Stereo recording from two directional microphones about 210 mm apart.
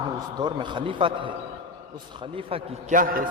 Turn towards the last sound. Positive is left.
turn(degrees=-45)  # may be behind; listen again after turning